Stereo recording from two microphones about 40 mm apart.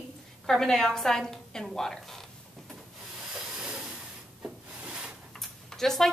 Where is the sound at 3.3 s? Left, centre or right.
Centre.